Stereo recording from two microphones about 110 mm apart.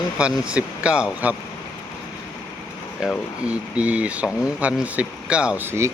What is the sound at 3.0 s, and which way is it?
Speech, 5° right (ahead or behind).